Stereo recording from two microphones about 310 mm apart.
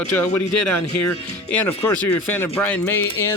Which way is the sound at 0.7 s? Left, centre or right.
Left.